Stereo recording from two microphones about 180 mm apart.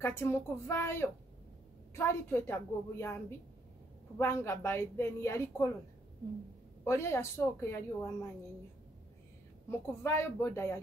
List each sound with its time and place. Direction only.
0.0 s a woman's voice: 15° left (ahead or behind)
6.8 s a woman's voice: 15° left (ahead or behind)
9.7 s a woman's voice: 15° left (ahead or behind)